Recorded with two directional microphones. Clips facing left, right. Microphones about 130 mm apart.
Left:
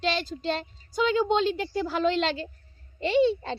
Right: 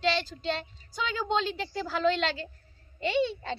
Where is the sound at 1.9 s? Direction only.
25° left (ahead or behind).